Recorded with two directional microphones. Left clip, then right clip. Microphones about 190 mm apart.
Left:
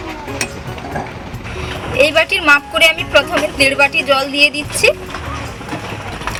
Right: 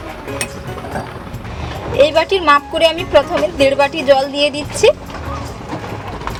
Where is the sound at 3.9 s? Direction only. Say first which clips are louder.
Right 1 dB; 35° right (ahead or behind).